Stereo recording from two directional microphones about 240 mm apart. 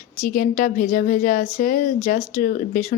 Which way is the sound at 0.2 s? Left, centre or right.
Left.